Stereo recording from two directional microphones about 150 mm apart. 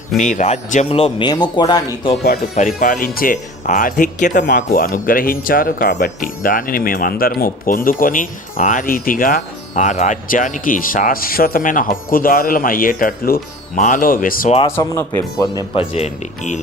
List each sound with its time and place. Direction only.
0.2 s speech: 55° left (ahead or behind); by 1.8 s 30° left (ahead or behind)
2.6 s speech: 60° left (ahead or behind)
14.8 s speech: 20° left (ahead or behind)
15.7 s speech: 40° left (ahead or behind)